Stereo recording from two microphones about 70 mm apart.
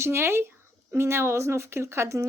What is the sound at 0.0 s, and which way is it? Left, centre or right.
Speech, right.